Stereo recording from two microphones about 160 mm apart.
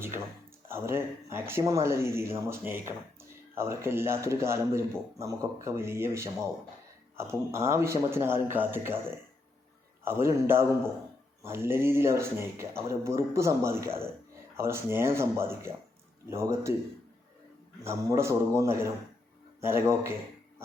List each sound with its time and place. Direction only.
0.7 s speech: 15° right (ahead or behind)
10.2 s speech: 15° right (ahead or behind)
17.8 s a man's voice: 20° right (ahead or behind)